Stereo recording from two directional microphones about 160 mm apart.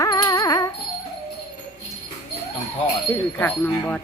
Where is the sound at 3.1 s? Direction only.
10° left (ahead or behind).